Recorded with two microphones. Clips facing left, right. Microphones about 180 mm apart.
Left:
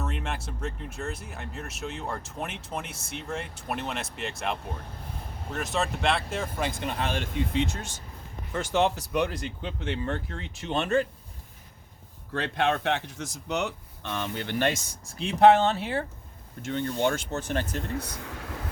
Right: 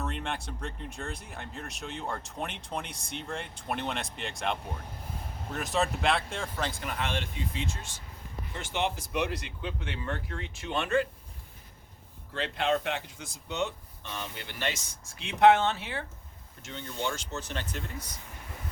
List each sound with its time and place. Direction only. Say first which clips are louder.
0.0 s speech: left 1 dB; 5° left (ahead or behind)
6.7 s speech: left 5 dB; 20° left (ahead or behind)
6.9 s speech: left 3 dB; 40° left (ahead or behind)
7.3 s speech: left 8 dB; 65° left (ahead or behind)
8.5 s speech: left 7 dB; 45° left (ahead or behind)
12.3 s speech: left 2 dB; 65° left (ahead or behind)
15.0 s speech: left 3 dB; 35° left (ahead or behind)
16.6 s speech: left 8 dB; 55° left (ahead or behind)
17.9 s speech: left 9 dB; 65° left (ahead or behind); by 18.7 s 80° left